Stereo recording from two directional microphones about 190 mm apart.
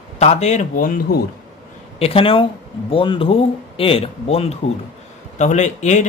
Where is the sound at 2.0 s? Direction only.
30° left (ahead or behind).